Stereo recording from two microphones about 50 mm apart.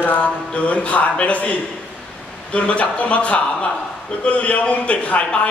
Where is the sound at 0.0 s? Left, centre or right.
Left.